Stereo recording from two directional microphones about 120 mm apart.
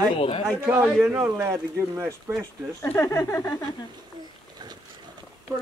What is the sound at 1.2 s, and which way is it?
Speech, 20° right (ahead or behind).